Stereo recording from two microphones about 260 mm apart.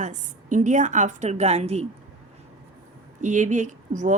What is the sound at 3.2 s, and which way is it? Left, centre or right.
Speech, right.